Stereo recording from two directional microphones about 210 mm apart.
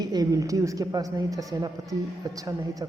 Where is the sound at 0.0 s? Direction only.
20° right (ahead or behind).